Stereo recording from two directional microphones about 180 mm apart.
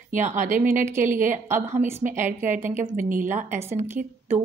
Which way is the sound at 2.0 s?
45° right (ahead or behind).